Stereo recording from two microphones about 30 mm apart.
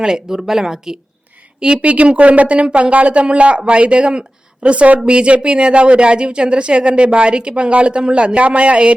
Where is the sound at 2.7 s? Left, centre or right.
Right.